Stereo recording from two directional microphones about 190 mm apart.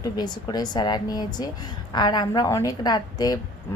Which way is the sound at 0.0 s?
20° left (ahead or behind).